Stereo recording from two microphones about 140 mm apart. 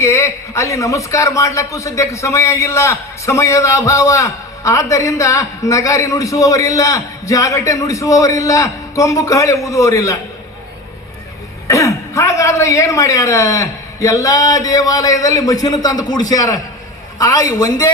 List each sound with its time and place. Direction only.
0.0 s a man's voice: 20° left (ahead or behind)
11.7 s a man's voice: 20° left (ahead or behind)